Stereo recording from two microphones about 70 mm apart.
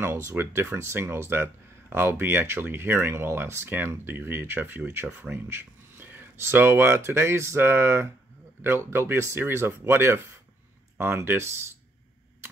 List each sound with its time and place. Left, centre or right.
0.0 s speech: right